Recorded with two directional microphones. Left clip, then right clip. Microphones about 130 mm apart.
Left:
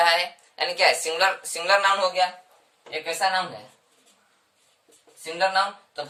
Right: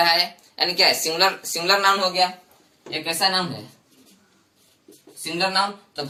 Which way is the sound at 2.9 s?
10° left (ahead or behind).